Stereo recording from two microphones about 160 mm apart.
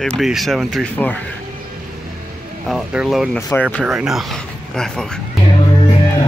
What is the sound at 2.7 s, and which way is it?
Speech, 5° right (ahead or behind).